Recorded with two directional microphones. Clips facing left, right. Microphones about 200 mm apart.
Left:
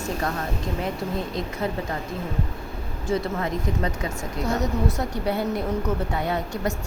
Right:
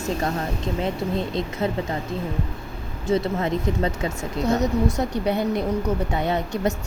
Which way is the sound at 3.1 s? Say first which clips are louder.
Right 3 dB; 25° right (ahead or behind).